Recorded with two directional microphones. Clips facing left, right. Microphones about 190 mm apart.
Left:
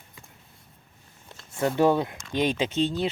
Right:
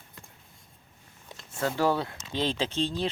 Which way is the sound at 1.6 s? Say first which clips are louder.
Left 5 dB; 20° left (ahead or behind).